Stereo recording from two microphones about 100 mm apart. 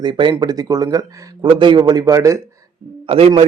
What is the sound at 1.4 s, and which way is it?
Speech, 55° right (ahead or behind).